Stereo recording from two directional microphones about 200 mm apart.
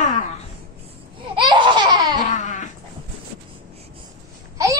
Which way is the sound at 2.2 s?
40° left (ahead or behind).